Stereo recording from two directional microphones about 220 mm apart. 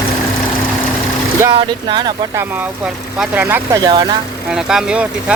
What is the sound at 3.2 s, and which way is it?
Speech, 10° right (ahead or behind).